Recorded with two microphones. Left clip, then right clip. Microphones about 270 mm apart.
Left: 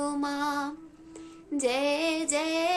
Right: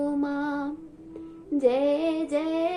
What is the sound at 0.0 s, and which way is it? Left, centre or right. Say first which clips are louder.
Mantra: right 2 dB; left.